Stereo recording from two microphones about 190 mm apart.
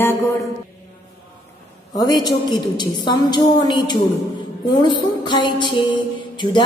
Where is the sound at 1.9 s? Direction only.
20° left (ahead or behind).